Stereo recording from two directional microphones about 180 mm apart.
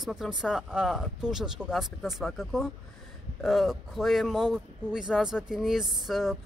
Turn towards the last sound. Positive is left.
turn(degrees=-5)  # may be behind; listen again after turning